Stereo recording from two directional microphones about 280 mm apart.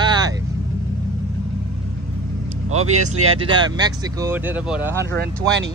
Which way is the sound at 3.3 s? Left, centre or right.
Centre.